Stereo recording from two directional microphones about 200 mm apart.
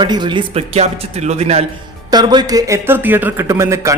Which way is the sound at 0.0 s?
20° right (ahead or behind).